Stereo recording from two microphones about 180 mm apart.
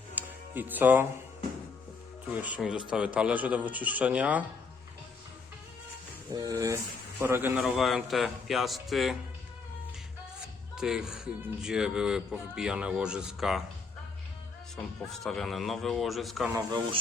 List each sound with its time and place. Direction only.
0.2 s music: 10° right (ahead or behind)
2.4 s speech: 5° right (ahead or behind)
6.3 s speech: 20° right (ahead or behind)
7.6 s speech: centre (ahead or behind)
10.8 s speech: 5° right (ahead or behind)
14.8 s speech: centre (ahead or behind)
16.6 s speech: 25° right (ahead or behind)